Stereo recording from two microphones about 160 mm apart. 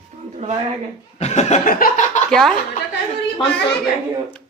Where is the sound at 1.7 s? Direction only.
55° left (ahead or behind).